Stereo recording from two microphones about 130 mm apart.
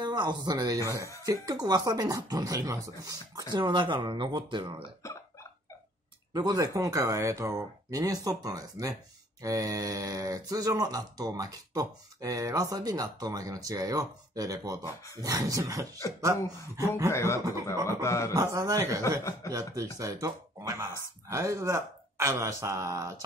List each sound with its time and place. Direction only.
0.0 s speech: 35° right (ahead or behind)
6.3 s speech: 30° right (ahead or behind)
17.1 s speech: 20° left (ahead or behind)
18.3 s speech: 25° right (ahead or behind)